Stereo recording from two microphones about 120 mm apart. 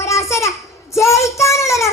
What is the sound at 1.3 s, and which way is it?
Child singing, 25° left (ahead or behind).